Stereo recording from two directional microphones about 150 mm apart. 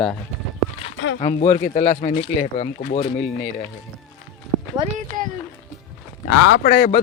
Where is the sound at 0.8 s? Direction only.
45° left (ahead or behind).